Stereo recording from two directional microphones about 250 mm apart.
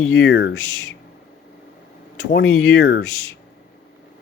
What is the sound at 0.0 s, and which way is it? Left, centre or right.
Speech, left.